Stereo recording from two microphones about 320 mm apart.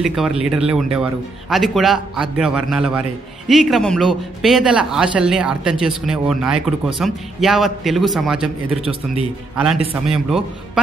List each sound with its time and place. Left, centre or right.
0.0 s speech: centre
8.6 s a man's voice: centre
10.0 s speech: centre